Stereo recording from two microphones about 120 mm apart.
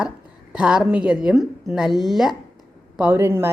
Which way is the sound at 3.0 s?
20° right (ahead or behind).